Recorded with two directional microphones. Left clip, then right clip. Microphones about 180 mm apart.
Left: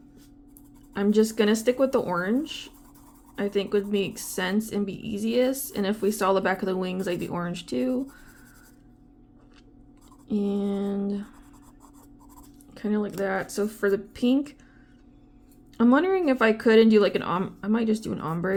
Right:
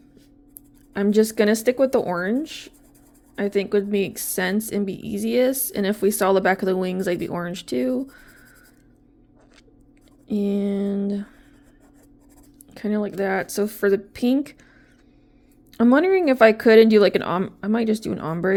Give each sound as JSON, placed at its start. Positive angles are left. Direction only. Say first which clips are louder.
{"t": 1.1, "sound": "a woman's voice", "louder": "right 4 dB", "side_deg": -30}
{"t": 10.2, "sound": "a woman's voice", "louder": "right 4 dB", "side_deg": -30}
{"t": 12.7, "sound": "a woman's voice", "louder": "right 3 dB", "side_deg": -35}
{"t": 15.8, "sound": "a woman's voice", "louder": "right 4 dB", "side_deg": -30}